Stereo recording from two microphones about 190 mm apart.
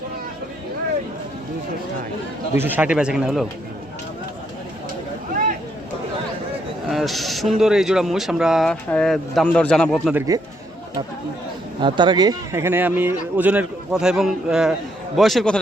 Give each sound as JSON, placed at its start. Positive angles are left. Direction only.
{"t": 2.6, "sound": "a man's voice", "side_deg": -10}
{"t": 6.9, "sound": "a man's voice", "side_deg": 0}
{"t": 10.2, "sound": "speech", "side_deg": -20}
{"t": 11.8, "sound": "speech", "side_deg": -25}